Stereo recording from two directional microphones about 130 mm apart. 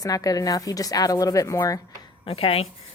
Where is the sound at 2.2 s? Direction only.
50° left (ahead or behind).